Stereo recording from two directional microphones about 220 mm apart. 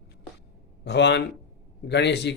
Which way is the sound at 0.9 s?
50° left (ahead or behind).